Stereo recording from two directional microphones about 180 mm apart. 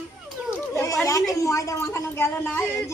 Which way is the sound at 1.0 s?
20° left (ahead or behind).